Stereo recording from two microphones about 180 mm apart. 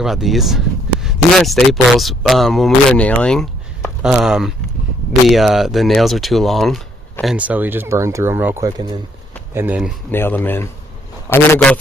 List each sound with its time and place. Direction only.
0.0 s speech: centre (ahead or behind)
10.1 s speech: 10° left (ahead or behind)